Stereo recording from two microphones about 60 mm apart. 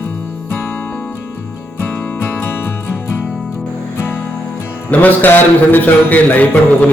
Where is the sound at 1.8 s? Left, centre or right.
Left.